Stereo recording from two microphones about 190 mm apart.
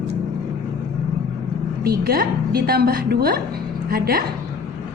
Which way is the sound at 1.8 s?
55° right (ahead or behind).